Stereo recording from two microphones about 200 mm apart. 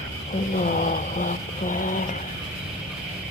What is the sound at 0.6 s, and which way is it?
Speech, 45° left (ahead or behind).